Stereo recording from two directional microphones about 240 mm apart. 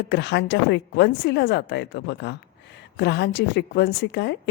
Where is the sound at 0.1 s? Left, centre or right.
Left.